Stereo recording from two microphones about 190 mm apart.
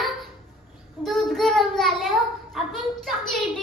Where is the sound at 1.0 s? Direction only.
Centre (ahead or behind).